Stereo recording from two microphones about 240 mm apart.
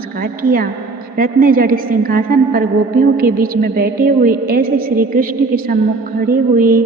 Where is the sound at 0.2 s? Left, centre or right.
Right.